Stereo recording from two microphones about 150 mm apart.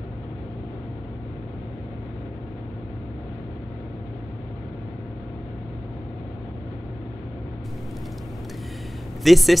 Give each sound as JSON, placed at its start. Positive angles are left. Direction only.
{"t": 9.2, "sound": "speech", "side_deg": 0}